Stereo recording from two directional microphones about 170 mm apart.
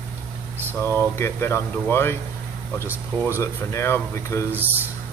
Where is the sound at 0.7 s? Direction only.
15° left (ahead or behind).